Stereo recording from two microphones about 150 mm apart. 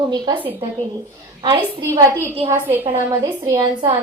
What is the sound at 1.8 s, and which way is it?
A woman's voice, 20° right (ahead or behind).